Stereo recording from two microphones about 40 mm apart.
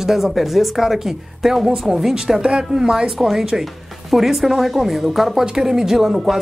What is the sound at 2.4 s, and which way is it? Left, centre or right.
A woman's voice, right.